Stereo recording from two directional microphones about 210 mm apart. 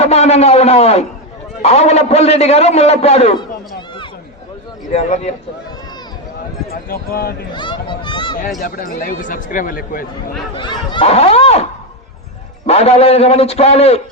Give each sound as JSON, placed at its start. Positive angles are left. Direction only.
{"t": 0.0, "sound": "a man's voice", "side_deg": 30}
{"t": 6.8, "sound": "speech", "side_deg": 45}
{"t": 7.5, "sound": "speech", "side_deg": 20}
{"t": 8.6, "sound": "speech", "side_deg": 45}
{"t": 10.5, "sound": "a man's voice", "side_deg": 20}
{"t": 12.6, "sound": "a man's voice", "side_deg": 30}